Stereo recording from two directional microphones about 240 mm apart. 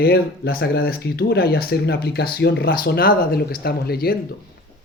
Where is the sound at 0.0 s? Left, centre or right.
Left.